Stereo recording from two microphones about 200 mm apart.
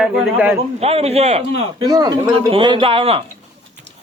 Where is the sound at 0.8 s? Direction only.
30° right (ahead or behind).